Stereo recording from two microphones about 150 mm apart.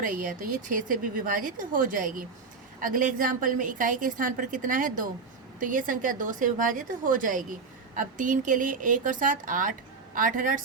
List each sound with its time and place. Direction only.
0.0 s speech: 65° right (ahead or behind)